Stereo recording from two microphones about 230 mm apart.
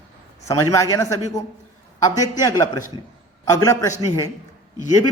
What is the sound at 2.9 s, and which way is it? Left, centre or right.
Speech, centre.